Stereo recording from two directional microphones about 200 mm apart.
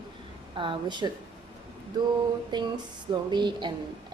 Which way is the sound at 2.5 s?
20° right (ahead or behind).